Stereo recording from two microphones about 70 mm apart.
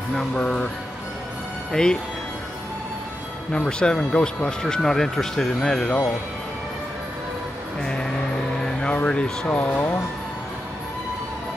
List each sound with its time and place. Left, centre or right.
0.1 s speech: centre
0.4 s speech: centre
1.7 s speech: centre
3.5 s speech: centre
7.8 s vehicle: centre